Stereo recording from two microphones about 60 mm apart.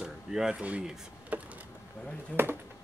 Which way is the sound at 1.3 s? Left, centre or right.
Right.